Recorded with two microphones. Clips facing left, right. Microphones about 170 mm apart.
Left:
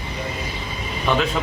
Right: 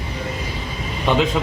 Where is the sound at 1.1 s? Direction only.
20° right (ahead or behind).